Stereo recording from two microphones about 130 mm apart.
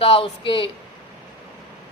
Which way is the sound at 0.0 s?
45° left (ahead or behind).